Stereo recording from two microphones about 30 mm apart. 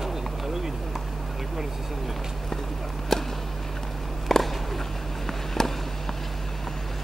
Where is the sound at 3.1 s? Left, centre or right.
Centre.